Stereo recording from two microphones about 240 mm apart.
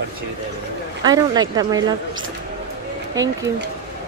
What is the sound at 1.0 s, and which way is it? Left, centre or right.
Speech, centre.